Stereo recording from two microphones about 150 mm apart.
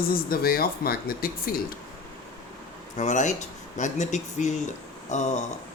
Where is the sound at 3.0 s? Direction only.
55° left (ahead or behind).